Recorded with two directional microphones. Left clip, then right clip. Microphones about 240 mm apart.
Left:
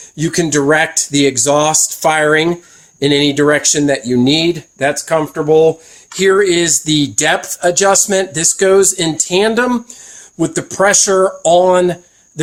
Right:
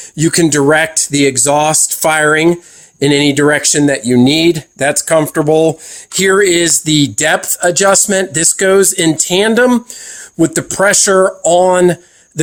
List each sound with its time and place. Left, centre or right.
0.2 s speech: right